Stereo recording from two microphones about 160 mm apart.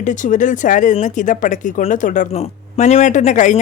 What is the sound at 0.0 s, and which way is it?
Speech, 50° left (ahead or behind).